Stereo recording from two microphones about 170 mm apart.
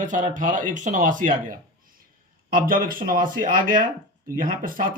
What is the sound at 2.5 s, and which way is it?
Speech, 55° right (ahead or behind).